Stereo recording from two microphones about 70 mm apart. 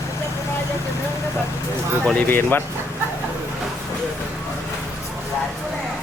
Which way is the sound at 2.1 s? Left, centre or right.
Left.